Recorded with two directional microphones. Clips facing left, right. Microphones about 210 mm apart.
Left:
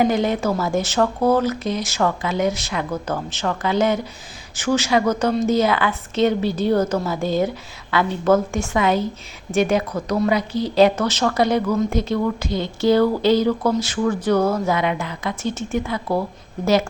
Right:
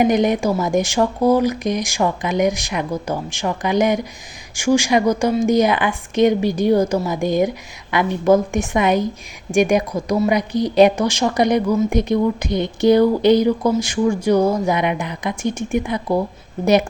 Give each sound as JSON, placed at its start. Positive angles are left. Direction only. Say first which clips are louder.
{"t": 0.0, "sound": "a woman's voice", "louder": "right 3 dB", "side_deg": -15}